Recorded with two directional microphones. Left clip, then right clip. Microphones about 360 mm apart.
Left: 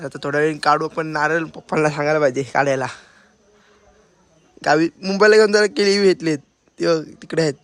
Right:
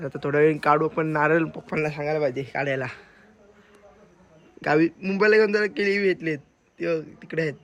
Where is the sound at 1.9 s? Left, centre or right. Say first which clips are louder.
Left 8 dB; left.